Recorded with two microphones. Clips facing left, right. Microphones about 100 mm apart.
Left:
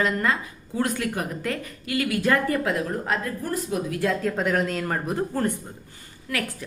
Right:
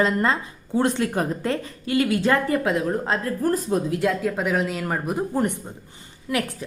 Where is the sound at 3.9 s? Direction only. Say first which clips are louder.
Right 2 dB; 15° right (ahead or behind).